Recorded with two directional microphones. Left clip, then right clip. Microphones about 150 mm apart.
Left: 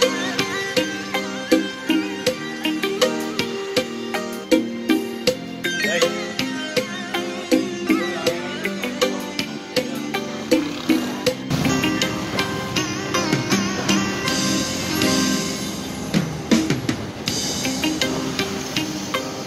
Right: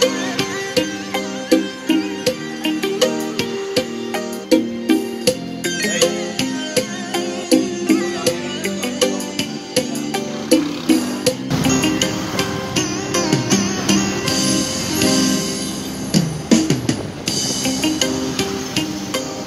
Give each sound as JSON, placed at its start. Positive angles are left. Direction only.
{"t": 0.0, "sound": "music", "side_deg": -30}